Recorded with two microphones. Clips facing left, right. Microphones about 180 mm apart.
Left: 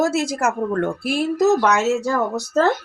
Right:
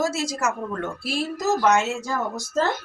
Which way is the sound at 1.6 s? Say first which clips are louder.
Left 3 dB; 70° left (ahead or behind).